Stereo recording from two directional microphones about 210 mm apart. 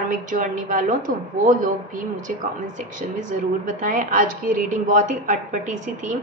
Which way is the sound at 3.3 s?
35° right (ahead or behind).